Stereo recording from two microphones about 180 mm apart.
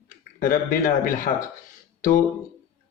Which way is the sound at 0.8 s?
45° left (ahead or behind).